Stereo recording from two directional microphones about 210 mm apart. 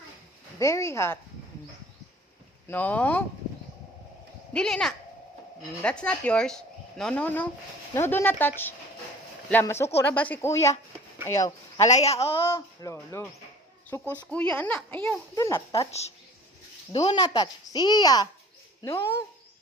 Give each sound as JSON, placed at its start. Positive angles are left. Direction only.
{"t": 0.6, "sound": "speech", "side_deg": 15}
{"t": 2.6, "sound": "speech", "side_deg": 10}
{"t": 4.5, "sound": "speech", "side_deg": 5}
{"t": 11.9, "sound": "a child's voice", "side_deg": 30}
{"t": 12.4, "sound": "speech", "side_deg": 10}
{"t": 15.7, "sound": "a woman's voice", "side_deg": 30}